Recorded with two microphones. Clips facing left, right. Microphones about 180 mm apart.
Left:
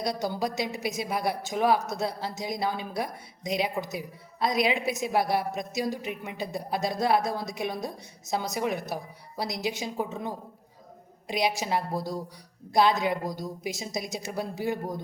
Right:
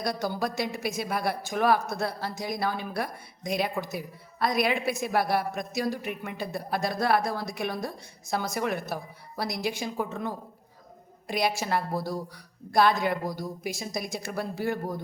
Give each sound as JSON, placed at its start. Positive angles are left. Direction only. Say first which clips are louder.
{"t": 0.0, "sound": "a woman's voice", "louder": "even", "side_deg": 20}